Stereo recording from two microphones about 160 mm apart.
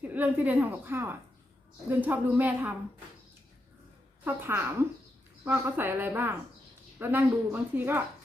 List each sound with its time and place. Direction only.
0.0 s a woman's voice: 10° right (ahead or behind)
4.2 s a woman's voice: 15° right (ahead or behind)